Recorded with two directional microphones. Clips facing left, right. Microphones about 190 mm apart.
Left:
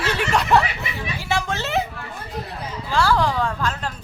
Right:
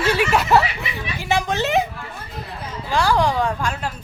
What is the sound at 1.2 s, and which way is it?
Speech, 15° right (ahead or behind).